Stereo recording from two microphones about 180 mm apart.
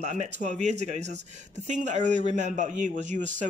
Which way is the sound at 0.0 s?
40° right (ahead or behind).